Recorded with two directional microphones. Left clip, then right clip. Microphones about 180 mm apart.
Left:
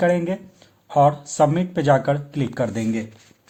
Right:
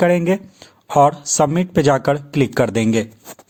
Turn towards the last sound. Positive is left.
turn(degrees=-50)  # may be behind; listen again after turning